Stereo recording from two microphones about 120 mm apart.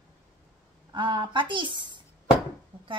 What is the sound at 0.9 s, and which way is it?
A woman's voice, 40° right (ahead or behind).